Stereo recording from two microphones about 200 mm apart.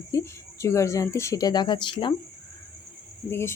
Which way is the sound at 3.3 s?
15° left (ahead or behind).